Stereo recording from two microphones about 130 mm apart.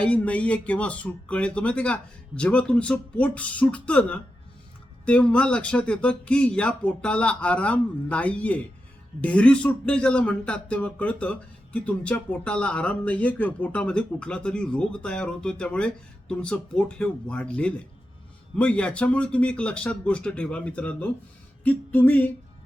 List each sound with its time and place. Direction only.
0.0 s speech: 10° left (ahead or behind)